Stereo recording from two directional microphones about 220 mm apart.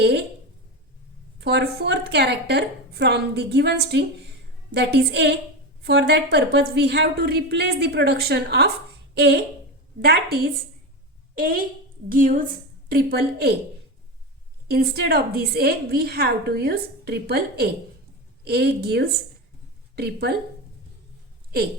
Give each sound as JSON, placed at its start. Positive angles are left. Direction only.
{"t": 1.4, "sound": "a woman's voice", "side_deg": -50}
{"t": 14.7, "sound": "a woman's voice", "side_deg": -45}